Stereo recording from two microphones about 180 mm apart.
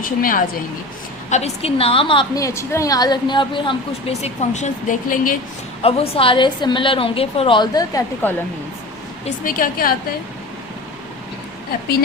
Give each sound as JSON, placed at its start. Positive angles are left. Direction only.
{"t": 0.0, "sound": "a woman's voice", "side_deg": 50}
{"t": 1.3, "sound": "a woman's voice", "side_deg": 35}
{"t": 5.8, "sound": "a woman's voice", "side_deg": 30}
{"t": 9.2, "sound": "a woman's voice", "side_deg": 50}